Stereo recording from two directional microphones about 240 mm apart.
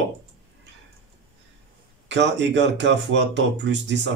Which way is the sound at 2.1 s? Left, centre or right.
Right.